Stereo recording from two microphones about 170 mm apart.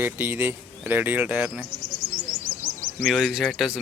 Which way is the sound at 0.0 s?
10° right (ahead or behind).